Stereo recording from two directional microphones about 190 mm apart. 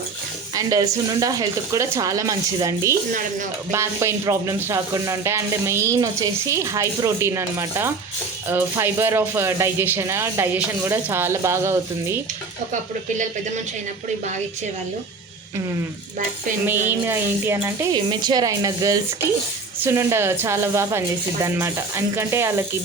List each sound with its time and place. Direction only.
0.5 s speech: 20° right (ahead or behind)
16.8 s speech: 10° right (ahead or behind)
17.9 s a woman's voice: 25° right (ahead or behind)